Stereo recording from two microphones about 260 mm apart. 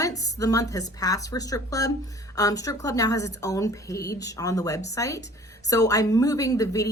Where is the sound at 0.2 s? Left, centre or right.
Centre.